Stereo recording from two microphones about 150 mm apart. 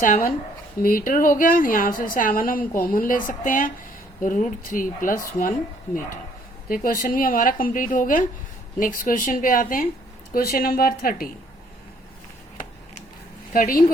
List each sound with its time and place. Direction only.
0.0 s a woman's voice: 65° left (ahead or behind)
10.3 s a woman's voice: 80° left
13.5 s a woman's voice: 70° left (ahead or behind)